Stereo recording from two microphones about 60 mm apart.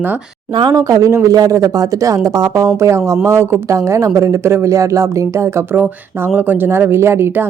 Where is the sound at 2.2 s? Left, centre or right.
Right.